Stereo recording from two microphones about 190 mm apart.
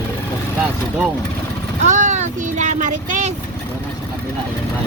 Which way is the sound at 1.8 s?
40° right (ahead or behind).